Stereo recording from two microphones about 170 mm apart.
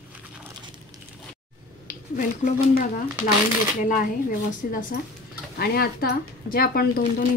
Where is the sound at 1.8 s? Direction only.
55° left (ahead or behind).